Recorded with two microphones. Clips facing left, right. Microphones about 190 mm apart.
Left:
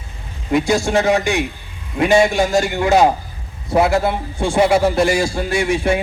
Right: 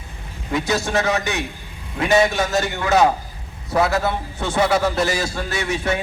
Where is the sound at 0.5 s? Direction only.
10° left (ahead or behind).